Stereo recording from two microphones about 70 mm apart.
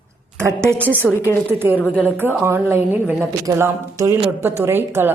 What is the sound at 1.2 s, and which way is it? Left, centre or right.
Speech, left.